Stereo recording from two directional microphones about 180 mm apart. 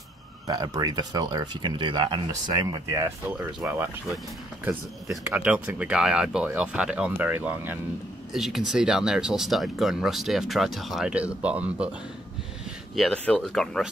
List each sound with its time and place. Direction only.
0.5 s speech: 20° right (ahead or behind)
2.9 s speech: 15° right (ahead or behind)
5.3 s speech: 10° right (ahead or behind)
12.9 s speech: 5° left (ahead or behind)